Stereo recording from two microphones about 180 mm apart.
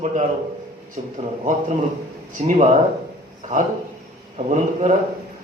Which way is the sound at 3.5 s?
45° right (ahead or behind).